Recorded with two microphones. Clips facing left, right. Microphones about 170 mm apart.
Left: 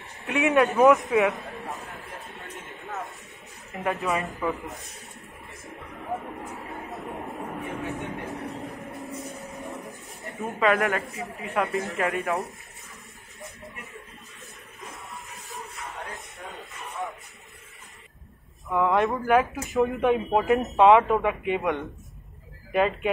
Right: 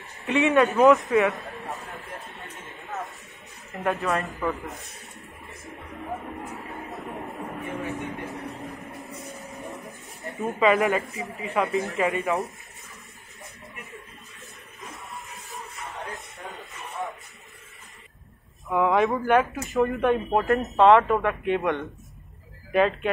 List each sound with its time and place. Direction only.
0.2 s speech: centre (ahead or behind)
3.7 s speech: centre (ahead or behind)
7.6 s vehicle: centre (ahead or behind)
9.5 s speech: centre (ahead or behind)
18.7 s speech: centre (ahead or behind)
20.7 s speech: 15° left (ahead or behind)